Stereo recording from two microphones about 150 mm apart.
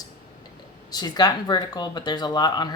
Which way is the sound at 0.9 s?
25° left (ahead or behind).